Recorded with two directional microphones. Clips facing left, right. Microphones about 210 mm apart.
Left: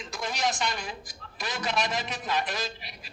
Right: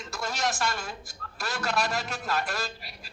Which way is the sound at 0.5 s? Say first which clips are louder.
Right 1 dB; 20° left (ahead or behind).